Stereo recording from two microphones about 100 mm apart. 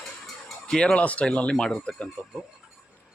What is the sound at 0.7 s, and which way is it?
Speech, 5° left (ahead or behind).